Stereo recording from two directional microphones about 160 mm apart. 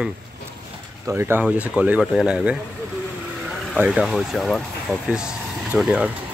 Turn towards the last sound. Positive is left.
turn(degrees=-5)  # may be behind; listen again after turning